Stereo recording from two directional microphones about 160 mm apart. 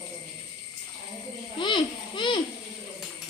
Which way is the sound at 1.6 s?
30° left (ahead or behind).